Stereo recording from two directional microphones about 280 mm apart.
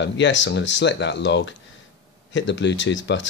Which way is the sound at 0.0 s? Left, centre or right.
Left.